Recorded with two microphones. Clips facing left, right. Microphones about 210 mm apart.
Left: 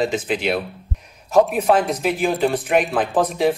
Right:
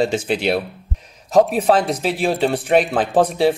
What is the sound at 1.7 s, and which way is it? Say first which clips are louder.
Speech: right 1 dB; 35° right (ahead or behind).